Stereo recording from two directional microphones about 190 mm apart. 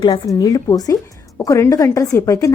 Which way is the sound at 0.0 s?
20° left (ahead or behind).